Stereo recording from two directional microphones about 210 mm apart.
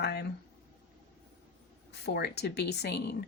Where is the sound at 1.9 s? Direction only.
50° left (ahead or behind).